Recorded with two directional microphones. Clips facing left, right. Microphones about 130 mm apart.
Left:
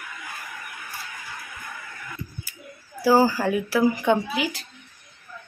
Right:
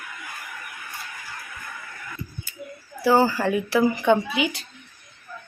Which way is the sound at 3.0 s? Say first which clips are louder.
Even; 5° left (ahead or behind).